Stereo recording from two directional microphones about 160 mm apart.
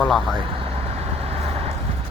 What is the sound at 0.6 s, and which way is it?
Vehicle, 40° right (ahead or behind).